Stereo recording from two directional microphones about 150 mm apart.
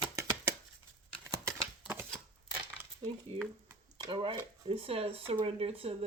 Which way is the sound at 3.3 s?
40° right (ahead or behind).